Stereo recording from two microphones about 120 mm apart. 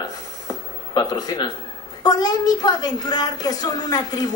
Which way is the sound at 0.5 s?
35° left (ahead or behind).